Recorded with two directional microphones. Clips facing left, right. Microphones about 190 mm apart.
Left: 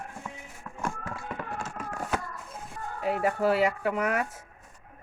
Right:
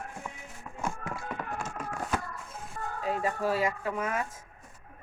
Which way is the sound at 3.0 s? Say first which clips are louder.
Left 4 dB; 65° left (ahead or behind).